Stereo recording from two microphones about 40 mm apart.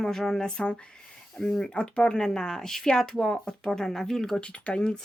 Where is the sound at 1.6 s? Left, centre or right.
Left.